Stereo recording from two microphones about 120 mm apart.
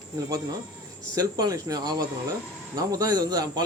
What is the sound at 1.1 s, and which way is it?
Speech, 30° right (ahead or behind).